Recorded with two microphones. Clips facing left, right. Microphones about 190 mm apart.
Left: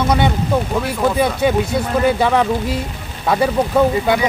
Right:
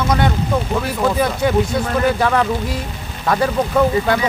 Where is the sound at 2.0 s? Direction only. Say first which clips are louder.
Left 2 dB; 15° left (ahead or behind).